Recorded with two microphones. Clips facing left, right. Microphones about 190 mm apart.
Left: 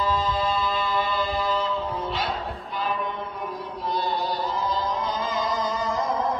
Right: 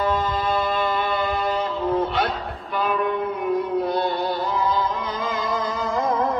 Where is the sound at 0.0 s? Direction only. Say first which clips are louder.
Right 2 dB; 60° right (ahead or behind).